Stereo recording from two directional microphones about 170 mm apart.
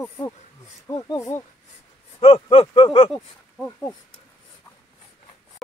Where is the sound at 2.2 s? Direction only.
35° left (ahead or behind).